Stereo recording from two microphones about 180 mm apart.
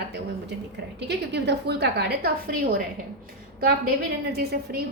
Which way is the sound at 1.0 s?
70° right (ahead or behind).